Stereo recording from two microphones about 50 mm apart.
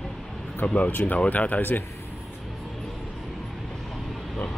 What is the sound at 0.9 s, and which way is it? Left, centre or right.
Speech, left.